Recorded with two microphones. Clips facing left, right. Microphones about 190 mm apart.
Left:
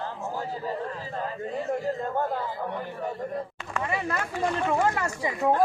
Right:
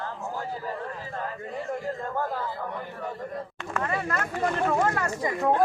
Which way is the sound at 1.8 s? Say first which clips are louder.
Left 2 dB; 20° left (ahead or behind).